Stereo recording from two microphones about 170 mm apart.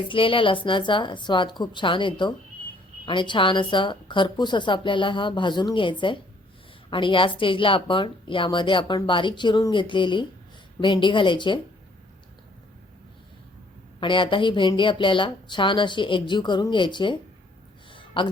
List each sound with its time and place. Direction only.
0.1 s speech: 30° left (ahead or behind)
14.0 s speech: 30° left (ahead or behind)
17.9 s a sound: 30° left (ahead or behind)